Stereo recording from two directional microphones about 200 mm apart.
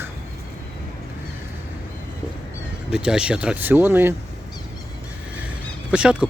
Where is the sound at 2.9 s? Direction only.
5° right (ahead or behind).